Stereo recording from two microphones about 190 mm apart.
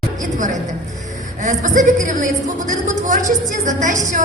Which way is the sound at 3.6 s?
40° right (ahead or behind).